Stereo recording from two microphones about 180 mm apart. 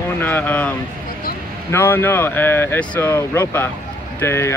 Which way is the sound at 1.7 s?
10° left (ahead or behind).